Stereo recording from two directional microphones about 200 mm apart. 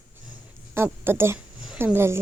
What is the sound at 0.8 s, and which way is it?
Speech, 10° right (ahead or behind).